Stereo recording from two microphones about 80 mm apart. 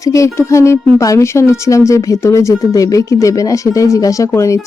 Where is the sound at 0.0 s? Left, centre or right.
Left.